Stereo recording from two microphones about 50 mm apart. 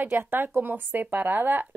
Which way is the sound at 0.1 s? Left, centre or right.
Right.